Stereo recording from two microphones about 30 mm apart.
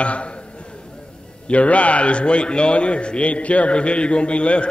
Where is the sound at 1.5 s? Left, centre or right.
Left.